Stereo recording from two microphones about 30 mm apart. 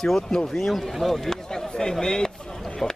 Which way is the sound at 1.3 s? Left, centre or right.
Centre.